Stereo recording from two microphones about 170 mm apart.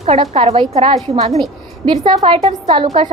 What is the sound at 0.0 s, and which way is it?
A woman's voice, 40° right (ahead or behind).